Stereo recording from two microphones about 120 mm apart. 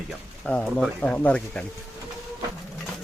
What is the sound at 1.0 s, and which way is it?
Speech, 10° left (ahead or behind).